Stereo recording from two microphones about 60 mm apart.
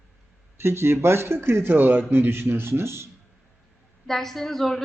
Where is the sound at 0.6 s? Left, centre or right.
Right.